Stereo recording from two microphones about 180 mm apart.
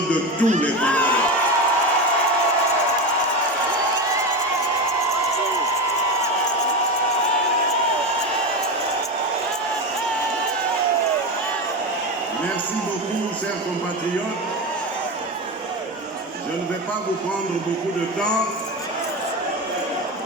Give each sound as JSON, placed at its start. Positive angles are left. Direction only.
{"t": 0.4, "sound": "speech", "side_deg": -40}
{"t": 0.8, "sound": "speech", "side_deg": 5}